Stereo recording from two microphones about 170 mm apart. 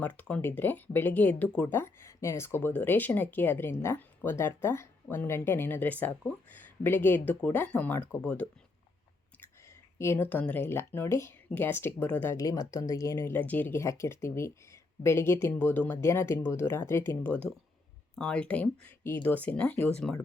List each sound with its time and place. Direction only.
0.0 s speech: 10° left (ahead or behind)